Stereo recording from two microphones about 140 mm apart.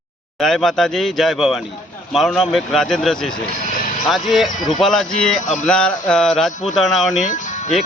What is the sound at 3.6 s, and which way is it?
Music, 75° left (ahead or behind).